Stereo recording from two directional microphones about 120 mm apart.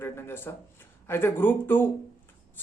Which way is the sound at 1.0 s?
20° left (ahead or behind).